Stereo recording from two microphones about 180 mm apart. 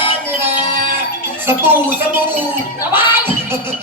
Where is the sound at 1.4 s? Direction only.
10° right (ahead or behind).